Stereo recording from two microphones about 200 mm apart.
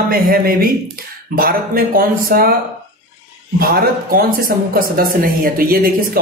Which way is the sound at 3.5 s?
45° right (ahead or behind).